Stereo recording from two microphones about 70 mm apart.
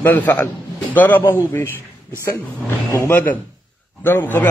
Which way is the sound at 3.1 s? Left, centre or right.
Left.